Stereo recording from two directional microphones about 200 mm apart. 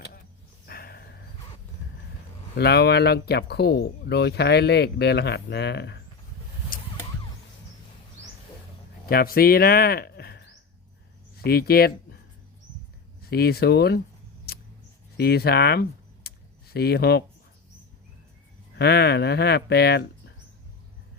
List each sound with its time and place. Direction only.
0.7 s a sound: 50° left (ahead or behind)
2.6 s speech: 55° left (ahead or behind)
9.0 s speech: 50° left (ahead or behind)
13.3 s speech: 50° left (ahead or behind)
15.2 s speech: 50° left (ahead or behind)
18.8 s speech: 55° left (ahead or behind)